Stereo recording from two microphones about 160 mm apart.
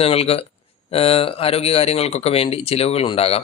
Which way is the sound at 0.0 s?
40° left (ahead or behind).